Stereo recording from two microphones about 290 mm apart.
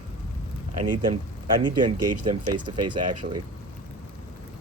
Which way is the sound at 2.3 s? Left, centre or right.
Centre.